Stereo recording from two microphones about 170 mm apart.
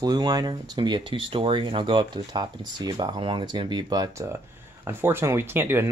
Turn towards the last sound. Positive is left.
turn(degrees=-15)  # may be behind; listen again after turning